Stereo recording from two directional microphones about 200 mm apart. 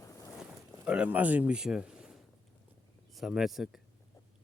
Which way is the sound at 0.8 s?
5° right (ahead or behind).